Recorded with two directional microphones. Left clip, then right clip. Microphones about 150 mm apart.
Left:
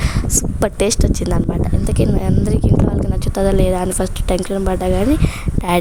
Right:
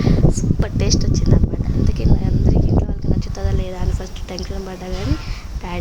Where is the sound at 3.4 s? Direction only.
55° left (ahead or behind).